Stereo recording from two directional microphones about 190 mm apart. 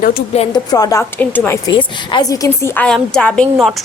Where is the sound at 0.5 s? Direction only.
20° left (ahead or behind).